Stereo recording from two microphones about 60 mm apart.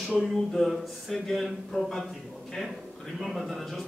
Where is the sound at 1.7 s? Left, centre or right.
Centre.